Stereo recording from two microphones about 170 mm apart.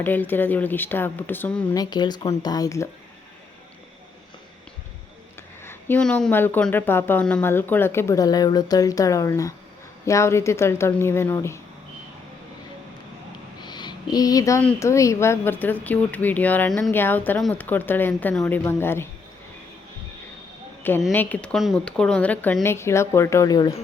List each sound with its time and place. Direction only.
0.0 s speech: 10° left (ahead or behind)
1.7 s speech: 25° left (ahead or behind)
5.6 s speech: 10° left (ahead or behind)
13.6 s a sound: 25° left (ahead or behind)
14.8 s speech: 20° left (ahead or behind)
21.1 s speech: 10° left (ahead or behind)